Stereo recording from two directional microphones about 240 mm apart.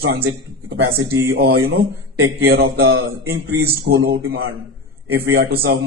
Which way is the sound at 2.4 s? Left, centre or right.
Right.